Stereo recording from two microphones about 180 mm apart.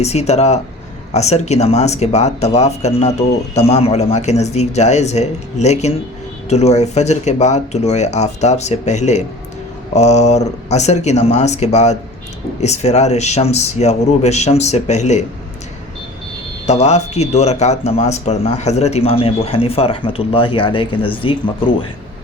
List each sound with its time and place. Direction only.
0.0 s speech: 35° left (ahead or behind)
16.6 s speech: 35° left (ahead or behind)